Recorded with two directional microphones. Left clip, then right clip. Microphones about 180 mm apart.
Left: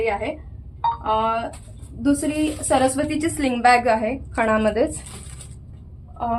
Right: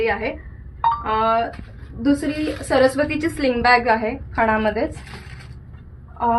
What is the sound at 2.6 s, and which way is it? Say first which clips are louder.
A woman's voice: right 3 dB; 25° left (ahead or behind).